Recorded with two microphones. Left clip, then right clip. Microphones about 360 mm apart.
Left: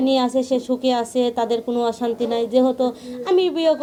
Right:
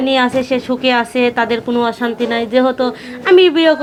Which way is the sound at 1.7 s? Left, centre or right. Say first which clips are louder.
Right 5 dB; right.